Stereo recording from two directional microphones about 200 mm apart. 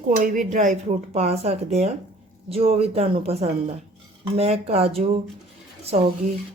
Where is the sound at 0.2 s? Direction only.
40° right (ahead or behind).